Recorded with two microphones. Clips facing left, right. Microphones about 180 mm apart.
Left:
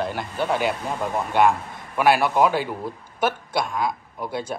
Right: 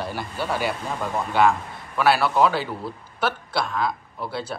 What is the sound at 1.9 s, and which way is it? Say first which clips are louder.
A man's voice: left 1 dB; 15° left (ahead or behind).